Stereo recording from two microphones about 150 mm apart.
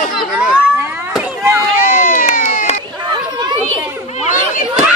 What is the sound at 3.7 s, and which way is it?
Chatter, 55° left (ahead or behind).